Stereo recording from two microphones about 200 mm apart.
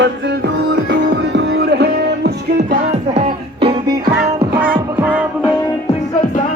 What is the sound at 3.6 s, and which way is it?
Music, 25° right (ahead or behind).